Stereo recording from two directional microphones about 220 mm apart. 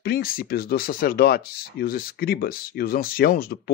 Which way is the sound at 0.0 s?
40° left (ahead or behind).